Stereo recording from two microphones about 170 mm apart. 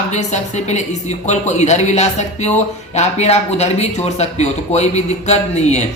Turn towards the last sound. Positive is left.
turn(degrees=40)  # may be behind; listen again after turning